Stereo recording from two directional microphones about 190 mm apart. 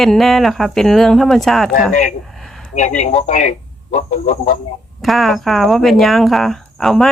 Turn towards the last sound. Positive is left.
turn(degrees=0)  # may be behind; listen again after turning